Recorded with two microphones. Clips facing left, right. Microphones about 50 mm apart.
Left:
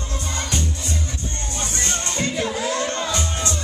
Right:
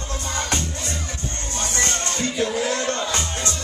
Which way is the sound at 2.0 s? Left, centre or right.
Left.